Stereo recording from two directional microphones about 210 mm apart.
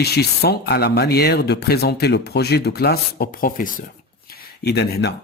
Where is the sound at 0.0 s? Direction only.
50° left (ahead or behind).